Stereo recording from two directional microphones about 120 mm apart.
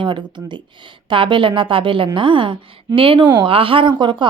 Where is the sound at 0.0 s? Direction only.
40° right (ahead or behind).